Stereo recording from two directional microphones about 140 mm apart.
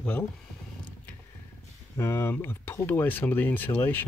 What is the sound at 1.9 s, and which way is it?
Speech, 15° left (ahead or behind).